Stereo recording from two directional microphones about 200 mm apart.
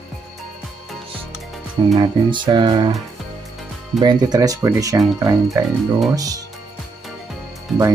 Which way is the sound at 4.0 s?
20° right (ahead or behind).